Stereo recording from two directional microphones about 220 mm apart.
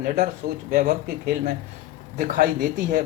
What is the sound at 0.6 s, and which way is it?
Speech, 40° right (ahead or behind).